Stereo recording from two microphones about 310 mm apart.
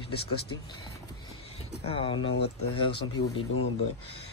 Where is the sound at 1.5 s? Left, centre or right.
Centre.